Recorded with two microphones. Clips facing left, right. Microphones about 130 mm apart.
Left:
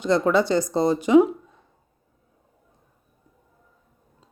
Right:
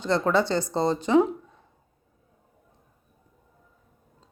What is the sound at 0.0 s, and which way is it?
A woman's voice, 15° left (ahead or behind).